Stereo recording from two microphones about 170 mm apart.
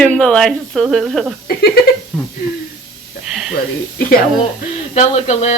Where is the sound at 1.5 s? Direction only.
70° left (ahead or behind).